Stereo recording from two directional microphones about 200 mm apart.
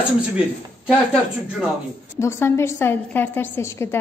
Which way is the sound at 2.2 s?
15° left (ahead or behind).